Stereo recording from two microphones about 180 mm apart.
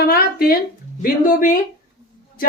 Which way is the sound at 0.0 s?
55° left (ahead or behind).